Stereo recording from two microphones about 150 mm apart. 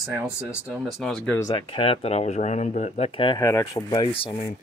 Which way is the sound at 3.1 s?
35° left (ahead or behind).